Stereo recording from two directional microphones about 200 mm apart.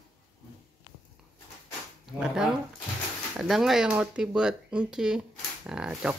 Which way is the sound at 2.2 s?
5° right (ahead or behind).